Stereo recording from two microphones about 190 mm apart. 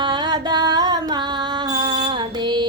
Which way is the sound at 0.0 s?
25° right (ahead or behind).